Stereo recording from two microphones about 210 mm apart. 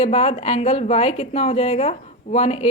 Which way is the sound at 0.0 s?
30° left (ahead or behind).